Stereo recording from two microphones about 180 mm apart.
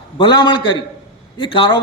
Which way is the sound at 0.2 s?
25° left (ahead or behind).